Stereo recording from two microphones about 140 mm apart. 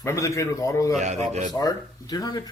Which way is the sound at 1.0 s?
55° right (ahead or behind).